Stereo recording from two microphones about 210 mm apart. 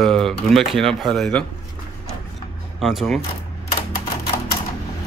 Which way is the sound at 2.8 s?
Centre (ahead or behind).